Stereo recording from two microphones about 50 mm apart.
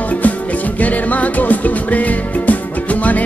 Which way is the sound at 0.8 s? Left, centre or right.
Left.